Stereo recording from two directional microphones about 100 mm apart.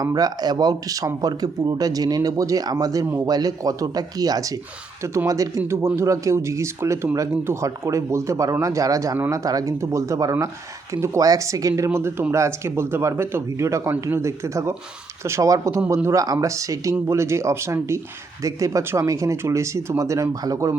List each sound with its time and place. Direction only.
0.0 s speech: 40° right (ahead or behind)